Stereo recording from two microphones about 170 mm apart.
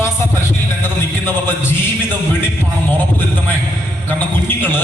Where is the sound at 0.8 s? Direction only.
10° left (ahead or behind).